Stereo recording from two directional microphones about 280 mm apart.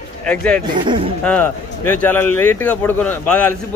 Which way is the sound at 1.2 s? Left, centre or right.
Centre.